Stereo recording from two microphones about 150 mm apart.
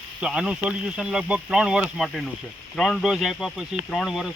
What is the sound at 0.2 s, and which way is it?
Speech, 5° right (ahead or behind).